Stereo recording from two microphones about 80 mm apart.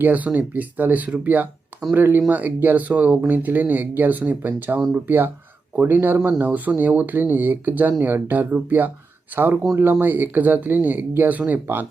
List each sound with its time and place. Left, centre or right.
0.0 s speech: right